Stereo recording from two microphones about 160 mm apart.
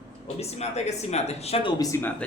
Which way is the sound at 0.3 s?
40° left (ahead or behind).